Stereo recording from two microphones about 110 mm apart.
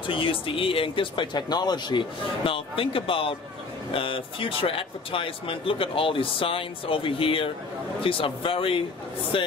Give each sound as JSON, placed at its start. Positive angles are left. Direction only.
{"t": 0.0, "sound": "speech", "side_deg": 50}